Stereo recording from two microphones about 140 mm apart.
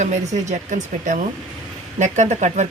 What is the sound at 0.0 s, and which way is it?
Speech, 55° right (ahead or behind).